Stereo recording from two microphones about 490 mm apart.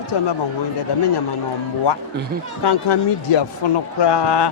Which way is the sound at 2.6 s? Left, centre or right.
Left.